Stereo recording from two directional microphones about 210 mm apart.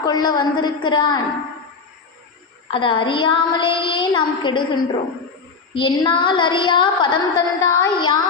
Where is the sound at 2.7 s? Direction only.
25° left (ahead or behind).